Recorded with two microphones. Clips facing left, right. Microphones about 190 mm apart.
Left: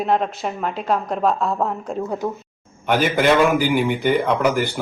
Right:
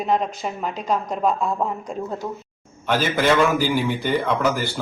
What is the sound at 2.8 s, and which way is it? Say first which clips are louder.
A man's voice: left 3 dB; 15° left (ahead or behind).